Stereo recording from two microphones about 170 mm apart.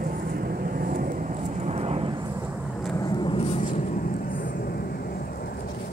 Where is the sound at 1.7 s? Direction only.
40° right (ahead or behind).